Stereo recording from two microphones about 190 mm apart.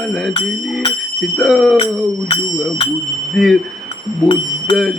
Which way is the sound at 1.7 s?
25° left (ahead or behind).